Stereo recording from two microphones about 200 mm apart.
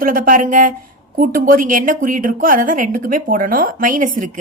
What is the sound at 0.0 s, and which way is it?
A woman's voice, 45° right (ahead or behind).